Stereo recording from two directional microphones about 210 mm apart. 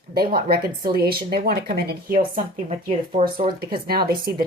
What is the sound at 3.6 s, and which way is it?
Speech, 45° right (ahead or behind).